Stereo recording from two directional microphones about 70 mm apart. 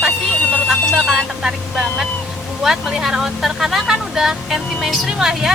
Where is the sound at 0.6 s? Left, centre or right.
Centre.